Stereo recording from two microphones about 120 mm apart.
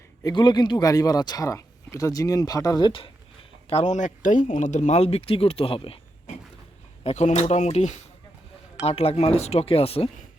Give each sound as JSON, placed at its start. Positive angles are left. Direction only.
{"t": 0.3, "sound": "speech", "side_deg": 40}
{"t": 3.7, "sound": "speech", "side_deg": 75}
{"t": 7.0, "sound": "speech", "side_deg": 65}
{"t": 8.8, "sound": "speech", "side_deg": 55}